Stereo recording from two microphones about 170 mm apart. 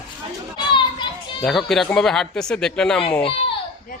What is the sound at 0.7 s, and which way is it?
Children playing, 30° left (ahead or behind).